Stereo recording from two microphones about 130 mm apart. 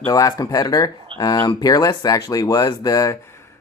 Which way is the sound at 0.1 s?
25° left (ahead or behind).